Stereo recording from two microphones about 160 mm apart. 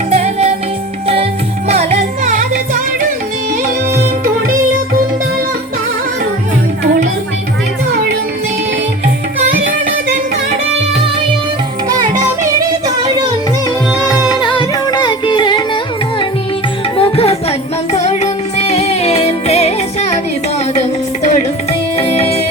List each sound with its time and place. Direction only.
0.1 s music: 40° right (ahead or behind); by 4.5 s 60° right (ahead or behind)
14.0 s music: 5° right (ahead or behind)
14.4 s music: 30° left (ahead or behind)
17.0 s music: 35° left (ahead or behind)
21.2 s music: 45° left (ahead or behind)